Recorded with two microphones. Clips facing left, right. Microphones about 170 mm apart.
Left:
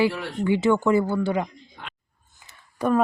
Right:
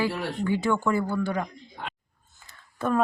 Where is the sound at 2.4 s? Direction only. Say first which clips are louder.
Left 4 dB; 15° left (ahead or behind).